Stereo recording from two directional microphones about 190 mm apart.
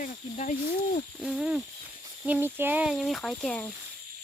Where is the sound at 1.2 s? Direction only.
5° right (ahead or behind).